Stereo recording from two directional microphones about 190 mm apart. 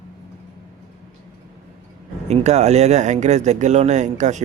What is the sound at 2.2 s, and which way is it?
Speech, 35° right (ahead or behind).